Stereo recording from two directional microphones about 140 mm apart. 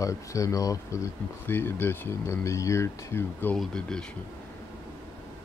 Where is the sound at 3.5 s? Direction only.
5° left (ahead or behind).